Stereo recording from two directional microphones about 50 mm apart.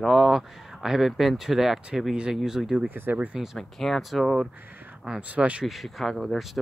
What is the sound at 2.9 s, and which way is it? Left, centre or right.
Speech, right.